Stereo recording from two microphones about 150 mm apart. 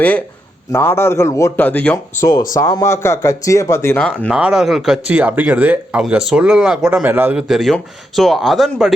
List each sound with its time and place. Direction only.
0.7 s a man's voice: 15° left (ahead or behind)
2.5 s speech: 25° left (ahead or behind)
4.3 s speech: 5° right (ahead or behind)